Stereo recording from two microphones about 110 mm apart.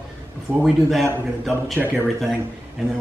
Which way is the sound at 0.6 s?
Centre (ahead or behind).